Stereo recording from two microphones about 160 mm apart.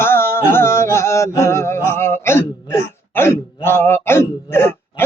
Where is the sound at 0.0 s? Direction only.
15° left (ahead or behind).